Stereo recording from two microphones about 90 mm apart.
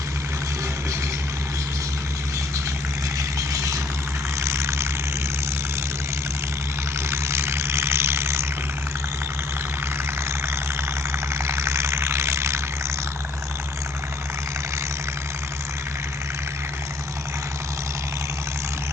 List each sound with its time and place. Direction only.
3.2 s vehicle: 35° right (ahead or behind)
7.1 s vehicle: 30° right (ahead or behind)
11.4 s vehicle: 30° right (ahead or behind)